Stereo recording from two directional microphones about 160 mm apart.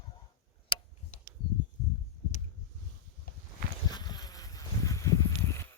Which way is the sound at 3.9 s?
25° left (ahead or behind).